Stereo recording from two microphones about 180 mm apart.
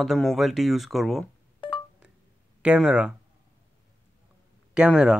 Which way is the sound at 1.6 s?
25° left (ahead or behind).